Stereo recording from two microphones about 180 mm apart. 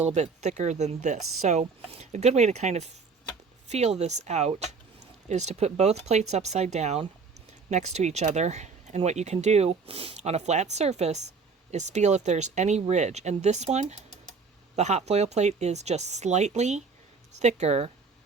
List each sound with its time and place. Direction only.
0.1 s speech: 40° right (ahead or behind)